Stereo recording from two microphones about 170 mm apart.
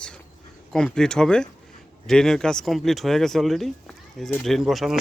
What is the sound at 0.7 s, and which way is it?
Speech, 5° left (ahead or behind).